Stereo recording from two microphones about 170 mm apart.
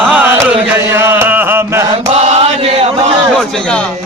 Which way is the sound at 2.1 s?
40° right (ahead or behind).